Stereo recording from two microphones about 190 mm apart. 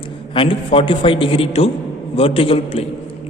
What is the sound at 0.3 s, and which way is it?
A man's voice, 30° left (ahead or behind).